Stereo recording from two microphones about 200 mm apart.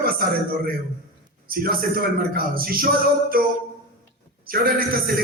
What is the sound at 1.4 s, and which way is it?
A man's voice, 45° right (ahead or behind).